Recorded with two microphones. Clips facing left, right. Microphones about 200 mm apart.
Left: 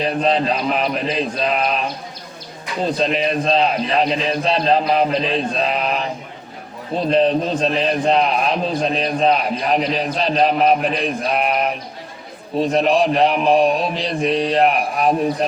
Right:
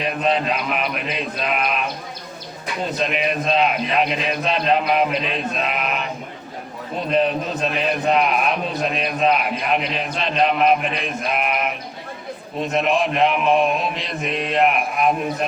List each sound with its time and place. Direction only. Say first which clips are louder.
0.0 s a man's voice: left 3 dB; 30° left (ahead or behind)